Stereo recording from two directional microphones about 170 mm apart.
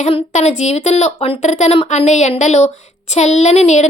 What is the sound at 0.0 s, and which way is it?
A woman's voice, 40° left (ahead or behind).